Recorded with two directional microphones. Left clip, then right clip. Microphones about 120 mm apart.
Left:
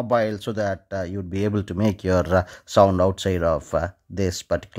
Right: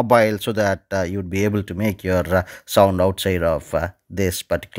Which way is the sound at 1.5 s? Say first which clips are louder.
Right 1 dB; centre (ahead or behind).